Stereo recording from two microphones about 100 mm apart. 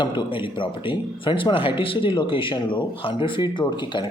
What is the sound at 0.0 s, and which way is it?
Speech, 55° left (ahead or behind).